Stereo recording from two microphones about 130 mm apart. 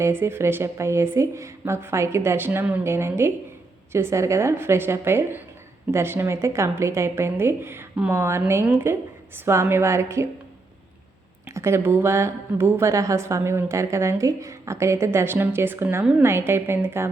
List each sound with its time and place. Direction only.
0.0 s a woman's voice: 20° right (ahead or behind)
11.4 s a woman's voice: 20° right (ahead or behind)